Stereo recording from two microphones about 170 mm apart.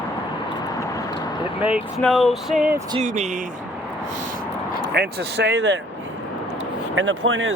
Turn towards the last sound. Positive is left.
turn(degrees=-90)